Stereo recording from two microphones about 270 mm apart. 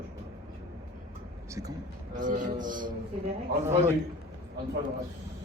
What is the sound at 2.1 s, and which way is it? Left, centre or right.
Speech, right.